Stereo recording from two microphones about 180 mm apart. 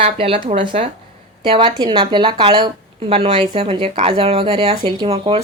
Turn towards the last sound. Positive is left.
turn(degrees=-30)  # may be behind; listen again after turning